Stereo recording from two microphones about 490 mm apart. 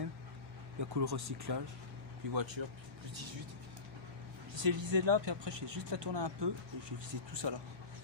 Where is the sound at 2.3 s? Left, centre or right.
Right.